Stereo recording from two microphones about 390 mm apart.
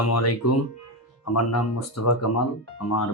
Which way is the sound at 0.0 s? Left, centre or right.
Left.